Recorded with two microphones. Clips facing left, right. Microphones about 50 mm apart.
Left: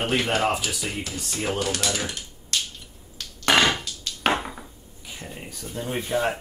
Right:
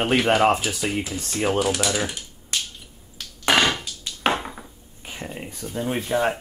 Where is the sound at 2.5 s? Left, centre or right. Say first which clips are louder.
Even; centre.